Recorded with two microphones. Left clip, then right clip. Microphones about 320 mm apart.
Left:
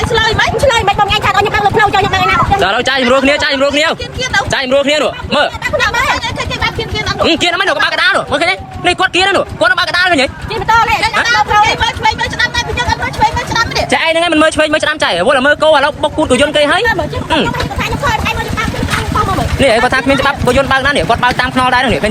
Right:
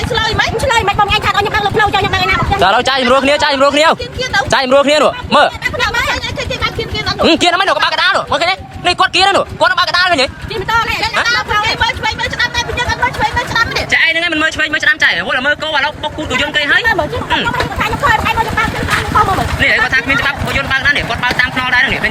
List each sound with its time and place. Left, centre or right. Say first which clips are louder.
0.1 s a sound: left 2 dB; left
0.8 s a sound: left 1 dB; centre
2.6 s speech: right 1 dB; centre
7.3 s speech: right 2 dB; centre
11.0 s speech: left 3 dB; left
13.9 s speech: left 1 dB; centre
18.0 s vehicle: right 4 dB; centre
19.5 s speech: left 3 dB; centre